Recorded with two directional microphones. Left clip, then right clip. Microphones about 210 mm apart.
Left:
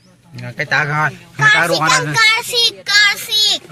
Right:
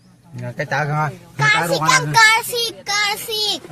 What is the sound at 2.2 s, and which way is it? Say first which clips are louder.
Speech: right 1 dB; 55° right (ahead or behind).